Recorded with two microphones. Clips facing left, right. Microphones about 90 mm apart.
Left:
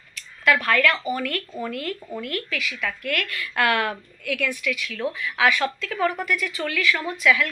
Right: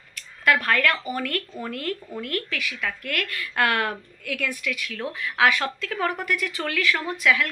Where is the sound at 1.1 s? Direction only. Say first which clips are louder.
Left 1 dB; 40° right (ahead or behind).